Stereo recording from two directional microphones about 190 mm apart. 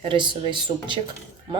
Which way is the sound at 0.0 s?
25° right (ahead or behind).